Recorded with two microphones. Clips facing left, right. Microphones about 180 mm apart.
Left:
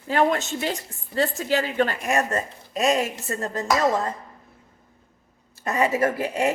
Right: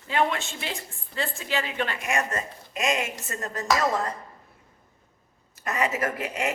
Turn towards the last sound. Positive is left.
turn(degrees=30)  # may be behind; listen again after turning